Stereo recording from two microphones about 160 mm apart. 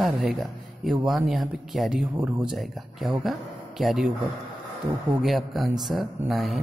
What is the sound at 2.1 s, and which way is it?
Speech, 20° right (ahead or behind).